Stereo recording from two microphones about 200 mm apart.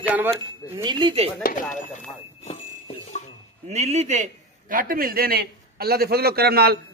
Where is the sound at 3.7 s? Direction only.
35° right (ahead or behind).